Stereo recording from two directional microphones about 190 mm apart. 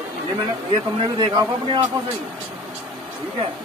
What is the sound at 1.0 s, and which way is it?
Speech, 20° right (ahead or behind).